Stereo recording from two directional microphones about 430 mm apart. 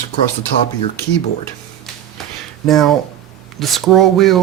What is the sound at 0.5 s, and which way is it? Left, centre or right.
Speech, centre.